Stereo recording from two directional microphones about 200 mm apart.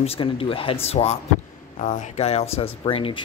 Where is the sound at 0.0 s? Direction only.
30° left (ahead or behind).